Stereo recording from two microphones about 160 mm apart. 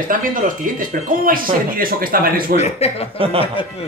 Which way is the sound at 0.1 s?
60° right (ahead or behind).